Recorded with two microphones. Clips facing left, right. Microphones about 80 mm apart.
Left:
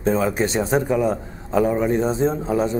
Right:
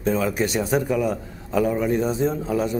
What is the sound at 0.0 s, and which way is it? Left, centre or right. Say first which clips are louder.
A man's voice: left 2 dB; left.